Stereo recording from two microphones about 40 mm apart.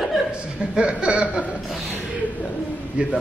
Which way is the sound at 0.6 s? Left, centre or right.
Right.